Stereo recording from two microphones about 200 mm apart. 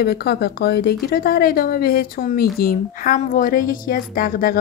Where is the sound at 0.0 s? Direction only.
50° left (ahead or behind).